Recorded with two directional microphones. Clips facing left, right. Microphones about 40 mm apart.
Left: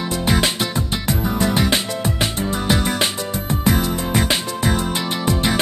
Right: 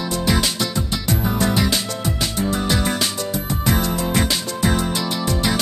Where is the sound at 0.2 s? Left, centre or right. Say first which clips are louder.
Left 2 dB; left.